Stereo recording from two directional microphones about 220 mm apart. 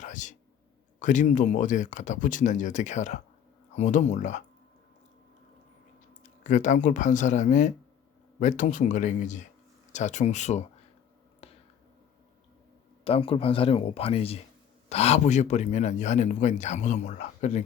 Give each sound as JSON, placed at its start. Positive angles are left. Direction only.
{"t": 0.0, "sound": "a sound", "side_deg": 35}
{"t": 0.9, "sound": "a man's voice", "side_deg": 35}
{"t": 6.2, "sound": "a man's voice", "side_deg": 35}
{"t": 11.4, "sound": "finger snapping", "side_deg": 25}
{"t": 13.1, "sound": "a man's voice", "side_deg": 25}